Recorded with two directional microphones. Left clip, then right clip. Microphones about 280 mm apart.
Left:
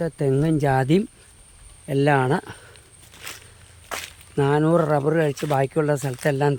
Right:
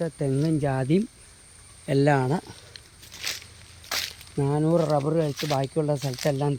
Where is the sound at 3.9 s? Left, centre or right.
Centre.